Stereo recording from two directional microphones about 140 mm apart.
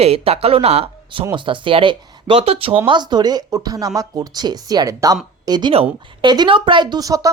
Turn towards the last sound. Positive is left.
turn(degrees=-25)  # may be behind; listen again after turning